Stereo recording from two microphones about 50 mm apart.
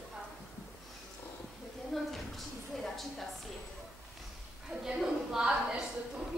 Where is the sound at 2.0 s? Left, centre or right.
Centre.